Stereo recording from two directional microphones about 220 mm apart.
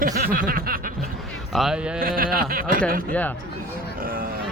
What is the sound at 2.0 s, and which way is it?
Speech, 40° right (ahead or behind).